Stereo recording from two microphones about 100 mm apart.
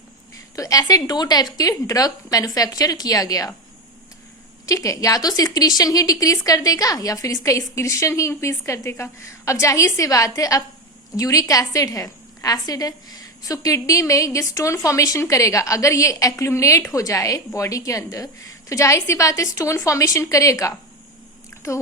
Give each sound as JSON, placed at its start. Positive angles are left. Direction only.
{"t": 0.5, "sound": "a woman's voice", "side_deg": 35}
{"t": 4.6, "sound": "a woman's voice", "side_deg": 35}